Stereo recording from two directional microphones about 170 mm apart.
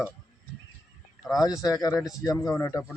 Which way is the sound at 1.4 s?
20° left (ahead or behind).